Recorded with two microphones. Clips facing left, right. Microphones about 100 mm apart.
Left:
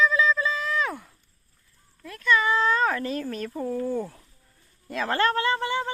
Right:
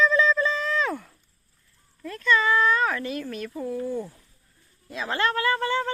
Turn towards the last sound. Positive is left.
turn(degrees=15)  # may be behind; listen again after turning